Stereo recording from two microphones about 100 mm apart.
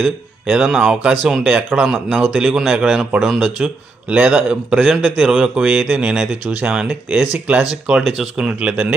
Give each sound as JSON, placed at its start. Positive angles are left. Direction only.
{"t": 0.4, "sound": "a man's voice", "side_deg": -10}
{"t": 2.3, "sound": "a man's voice", "side_deg": 0}